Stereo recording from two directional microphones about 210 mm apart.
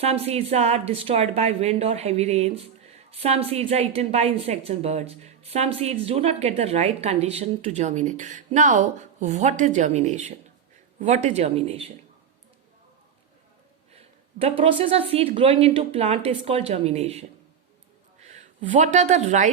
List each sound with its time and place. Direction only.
0.0 s a woman's voice: 30° right (ahead or behind)
13.9 s a woman's voice: 30° right (ahead or behind)